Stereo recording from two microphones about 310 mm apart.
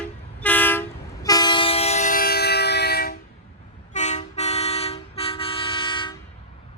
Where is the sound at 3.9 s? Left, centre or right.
Left.